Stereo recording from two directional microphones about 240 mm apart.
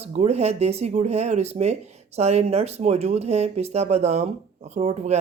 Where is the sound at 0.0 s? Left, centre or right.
Right.